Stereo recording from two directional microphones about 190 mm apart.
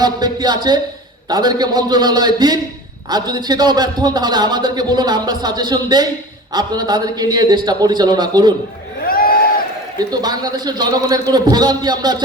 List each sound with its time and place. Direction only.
0.0 s a man's voice: 20° right (ahead or behind)
9.0 s a sound: 50° left (ahead or behind)
10.0 s a man's voice: 20° right (ahead or behind)